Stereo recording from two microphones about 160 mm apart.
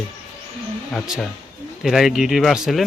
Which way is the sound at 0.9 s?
Centre (ahead or behind).